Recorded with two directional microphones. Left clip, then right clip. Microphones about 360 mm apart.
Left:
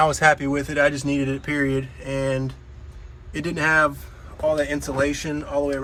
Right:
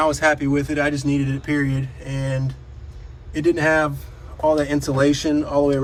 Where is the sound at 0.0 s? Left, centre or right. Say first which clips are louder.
Left 1 dB; centre.